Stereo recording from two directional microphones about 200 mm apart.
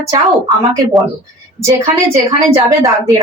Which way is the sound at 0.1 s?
15° right (ahead or behind).